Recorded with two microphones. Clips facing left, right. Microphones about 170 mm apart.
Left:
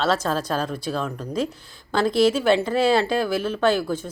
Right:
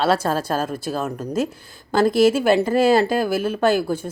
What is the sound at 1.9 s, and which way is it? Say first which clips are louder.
Speech: right 3 dB; 50° right (ahead or behind).